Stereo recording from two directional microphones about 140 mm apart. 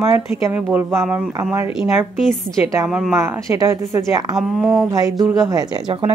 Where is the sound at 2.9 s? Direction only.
5° right (ahead or behind).